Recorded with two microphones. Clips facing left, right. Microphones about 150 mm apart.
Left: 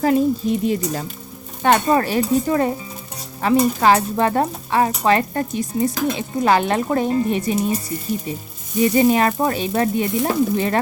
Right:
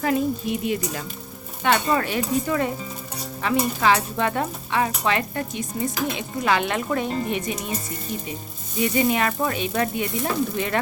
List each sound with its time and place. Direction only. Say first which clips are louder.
0.0 s stir: left 6 dB; 35° left (ahead or behind)
8.8 s stir: left 6 dB; 35° left (ahead or behind)